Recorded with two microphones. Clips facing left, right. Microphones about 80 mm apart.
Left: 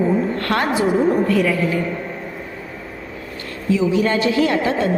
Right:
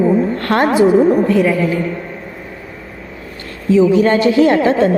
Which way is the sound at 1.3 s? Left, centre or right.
Right.